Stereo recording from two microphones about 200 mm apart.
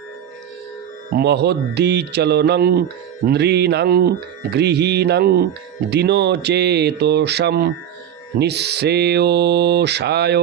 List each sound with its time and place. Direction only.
1.1 s mantra: 55° right (ahead or behind)